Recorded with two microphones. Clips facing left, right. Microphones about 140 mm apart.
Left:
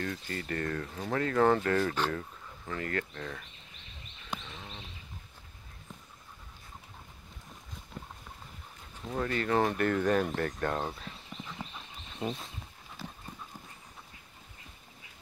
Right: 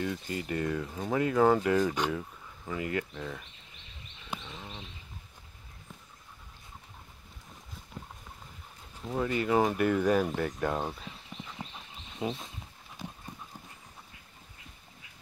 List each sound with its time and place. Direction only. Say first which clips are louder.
0.0 s speech: right 3 dB; 10° right (ahead or behind)
4.3 s a sound: right 1 dB; 10° right (ahead or behind)
9.0 s speech: right 2 dB; 10° right (ahead or behind)
13.0 s dog: right 1 dB; 15° right (ahead or behind)